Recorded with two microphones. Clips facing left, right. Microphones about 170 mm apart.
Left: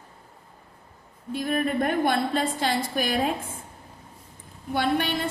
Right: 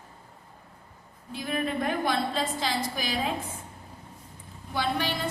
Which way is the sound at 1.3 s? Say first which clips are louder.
Left 5 dB; 50° left (ahead or behind).